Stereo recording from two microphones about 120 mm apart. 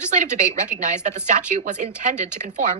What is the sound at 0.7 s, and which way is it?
Speech, 90° right.